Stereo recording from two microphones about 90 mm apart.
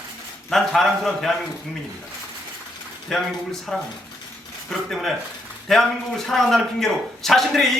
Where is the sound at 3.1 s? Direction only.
5° left (ahead or behind).